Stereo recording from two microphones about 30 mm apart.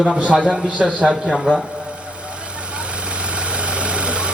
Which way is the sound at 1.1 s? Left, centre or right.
Centre.